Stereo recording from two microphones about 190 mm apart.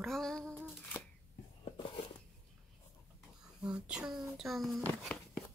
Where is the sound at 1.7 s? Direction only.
30° left (ahead or behind).